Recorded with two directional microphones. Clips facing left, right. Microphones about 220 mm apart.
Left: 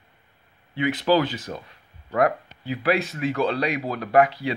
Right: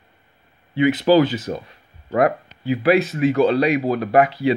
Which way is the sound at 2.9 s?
20° right (ahead or behind).